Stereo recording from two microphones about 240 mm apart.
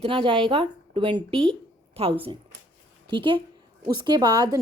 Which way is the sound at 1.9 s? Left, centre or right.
Right.